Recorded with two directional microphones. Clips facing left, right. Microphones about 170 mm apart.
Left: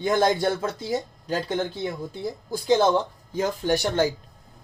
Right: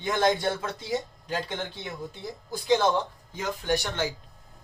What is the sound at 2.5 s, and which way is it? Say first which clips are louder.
Speech: left 3 dB; 30° left (ahead or behind).